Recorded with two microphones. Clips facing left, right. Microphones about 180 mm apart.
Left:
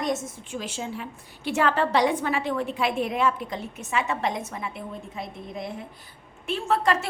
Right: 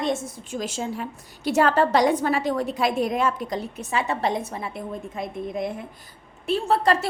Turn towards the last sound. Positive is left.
turn(degrees=-35)  # may be behind; listen again after turning